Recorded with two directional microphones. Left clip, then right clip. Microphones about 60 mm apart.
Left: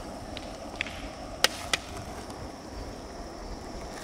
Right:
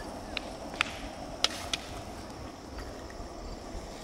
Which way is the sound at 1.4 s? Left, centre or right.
Left.